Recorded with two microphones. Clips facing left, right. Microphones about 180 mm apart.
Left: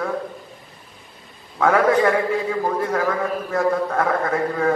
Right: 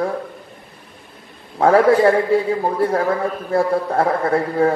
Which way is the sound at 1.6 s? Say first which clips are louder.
Right 4 dB; 30° right (ahead or behind).